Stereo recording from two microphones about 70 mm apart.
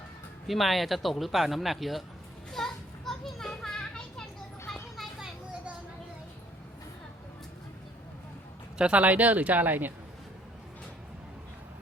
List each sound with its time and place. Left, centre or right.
0.4 s speech: centre
2.5 s children playing: centre
8.8 s speech: centre